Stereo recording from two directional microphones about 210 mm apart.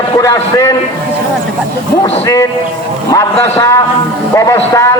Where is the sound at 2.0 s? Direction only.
15° left (ahead or behind).